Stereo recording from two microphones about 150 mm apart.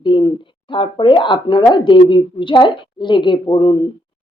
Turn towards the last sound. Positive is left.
turn(degrees=35)  # may be behind; listen again after turning